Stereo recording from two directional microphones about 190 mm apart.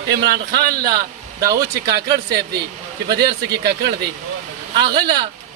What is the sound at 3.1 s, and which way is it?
Speech, 60° right (ahead or behind).